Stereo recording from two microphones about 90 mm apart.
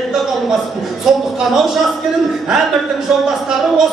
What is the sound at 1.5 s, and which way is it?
Music, 5° right (ahead or behind).